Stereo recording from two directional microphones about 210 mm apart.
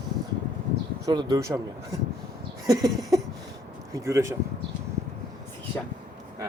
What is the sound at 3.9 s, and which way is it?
Speech, 15° right (ahead or behind).